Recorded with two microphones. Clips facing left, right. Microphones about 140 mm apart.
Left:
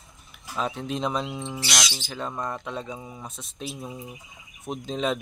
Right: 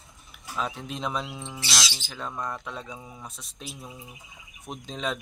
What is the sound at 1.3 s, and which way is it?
Speech, 20° left (ahead or behind).